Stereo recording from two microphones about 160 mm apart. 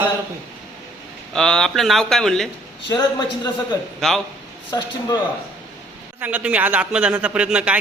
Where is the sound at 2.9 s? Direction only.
25° left (ahead or behind).